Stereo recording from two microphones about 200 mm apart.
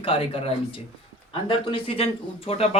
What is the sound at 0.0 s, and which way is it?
Speech, 30° left (ahead or behind).